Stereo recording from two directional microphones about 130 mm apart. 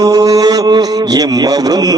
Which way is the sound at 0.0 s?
25° right (ahead or behind).